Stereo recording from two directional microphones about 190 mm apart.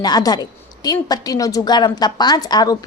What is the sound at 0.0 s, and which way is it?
A woman's voice, 20° left (ahead or behind).